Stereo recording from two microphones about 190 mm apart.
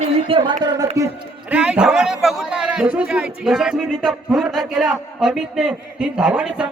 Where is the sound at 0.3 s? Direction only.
25° right (ahead or behind).